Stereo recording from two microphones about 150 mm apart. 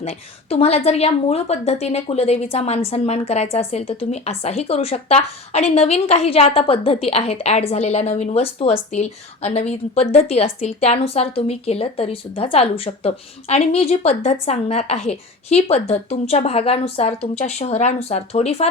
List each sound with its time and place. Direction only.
0.5 s a woman's voice: 40° left (ahead or behind)